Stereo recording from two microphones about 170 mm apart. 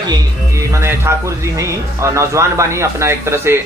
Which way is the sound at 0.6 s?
15° right (ahead or behind).